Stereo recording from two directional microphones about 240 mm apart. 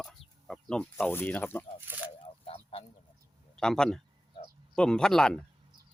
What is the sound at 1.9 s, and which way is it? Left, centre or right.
Speech, centre.